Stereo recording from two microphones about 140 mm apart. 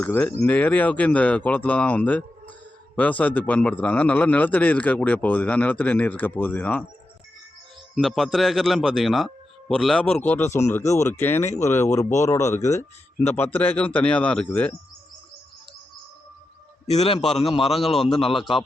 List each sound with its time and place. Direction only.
0.0 s a man's voice: 10° left (ahead or behind)
7.9 s a man's voice: centre (ahead or behind)
16.8 s a man's voice: 50° left (ahead or behind)
17.9 s speech: centre (ahead or behind)
18.2 s a man's voice: 40° left (ahead or behind)